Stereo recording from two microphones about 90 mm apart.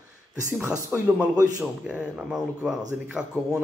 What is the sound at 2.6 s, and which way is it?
A man's voice, 10° right (ahead or behind).